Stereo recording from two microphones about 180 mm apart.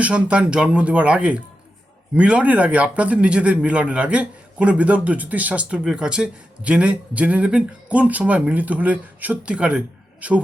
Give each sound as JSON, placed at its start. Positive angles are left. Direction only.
{"t": 0.0, "sound": "speech", "side_deg": -5}